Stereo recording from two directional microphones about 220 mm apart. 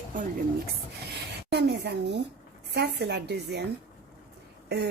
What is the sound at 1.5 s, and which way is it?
A woman's voice, 50° right (ahead or behind).